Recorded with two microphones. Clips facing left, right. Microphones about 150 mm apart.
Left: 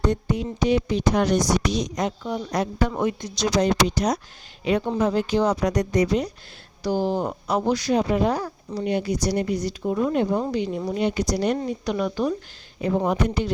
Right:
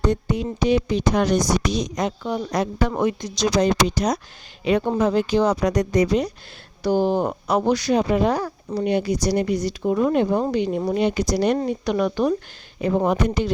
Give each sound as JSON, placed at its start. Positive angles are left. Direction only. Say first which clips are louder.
{"t": 0.1, "sound": "speech", "louder": "right 2 dB", "side_deg": -90}
{"t": 6.8, "sound": "speech", "louder": "right 4 dB", "side_deg": -60}
{"t": 10.5, "sound": "a woman's voice", "louder": "right 4 dB", "side_deg": -60}
{"t": 10.9, "sound": "speech", "louder": "right 1 dB", "side_deg": -90}
{"t": 11.5, "sound": "a woman's voice", "louder": "right 3 dB", "side_deg": -60}
{"t": 12.8, "sound": "speech", "louder": "right 2 dB", "side_deg": -80}